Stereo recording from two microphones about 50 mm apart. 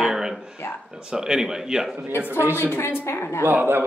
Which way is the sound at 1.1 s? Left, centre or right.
Centre.